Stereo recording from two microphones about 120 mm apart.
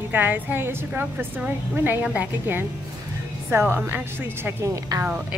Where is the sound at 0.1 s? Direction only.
15° right (ahead or behind).